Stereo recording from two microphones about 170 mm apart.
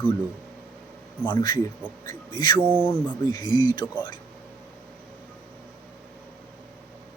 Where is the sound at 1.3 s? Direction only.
25° left (ahead or behind).